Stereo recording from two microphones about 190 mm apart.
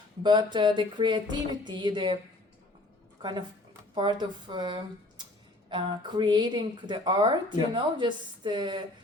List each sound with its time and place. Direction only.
0.2 s speech: 25° right (ahead or behind)
3.2 s a woman's voice: 25° right (ahead or behind)